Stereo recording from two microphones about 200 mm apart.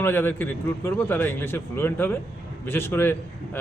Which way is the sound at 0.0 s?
10° left (ahead or behind).